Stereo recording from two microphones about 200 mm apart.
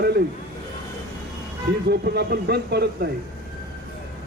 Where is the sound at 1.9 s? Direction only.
55° right (ahead or behind).